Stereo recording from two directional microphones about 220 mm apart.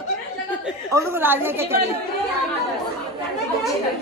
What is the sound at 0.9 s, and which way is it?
Speech, 10° right (ahead or behind).